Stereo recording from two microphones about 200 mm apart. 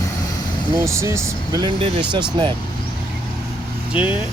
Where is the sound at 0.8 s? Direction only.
15° right (ahead or behind).